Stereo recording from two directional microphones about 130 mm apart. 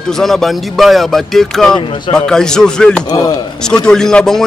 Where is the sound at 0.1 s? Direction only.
Centre (ahead or behind).